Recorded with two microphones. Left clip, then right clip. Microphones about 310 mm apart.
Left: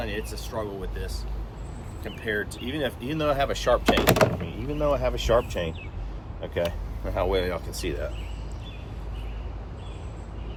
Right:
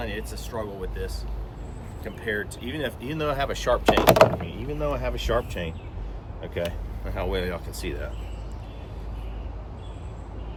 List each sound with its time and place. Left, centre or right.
0.0 s speech: centre
3.8 s speech: centre
4.8 s speech: centre